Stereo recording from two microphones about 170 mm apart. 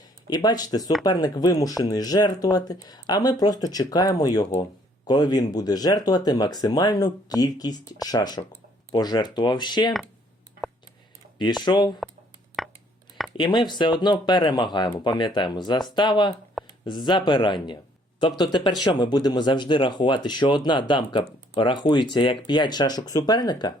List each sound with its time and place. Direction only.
0.3 s speech: 25° left (ahead or behind)
11.6 s speech: 25° left (ahead or behind)
12.6 s a sound: centre (ahead or behind)
13.3 s speech: 25° left (ahead or behind)
16.6 s a sound: centre (ahead or behind)
17.1 s speech: 25° left (ahead or behind)